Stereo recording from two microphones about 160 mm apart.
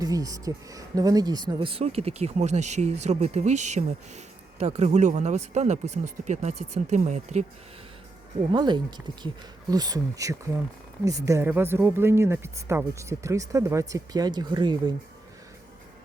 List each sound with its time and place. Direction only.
0.0 s speech: 20° right (ahead or behind); by 7.4 s 50° right (ahead or behind)
8.4 s speech: 30° right (ahead or behind)